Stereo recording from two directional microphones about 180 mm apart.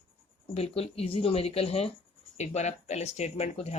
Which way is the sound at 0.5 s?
35° left (ahead or behind).